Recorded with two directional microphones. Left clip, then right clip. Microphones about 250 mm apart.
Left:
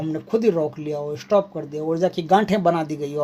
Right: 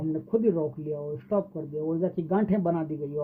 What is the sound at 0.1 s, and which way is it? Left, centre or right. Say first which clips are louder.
Speech: left 5 dB; centre.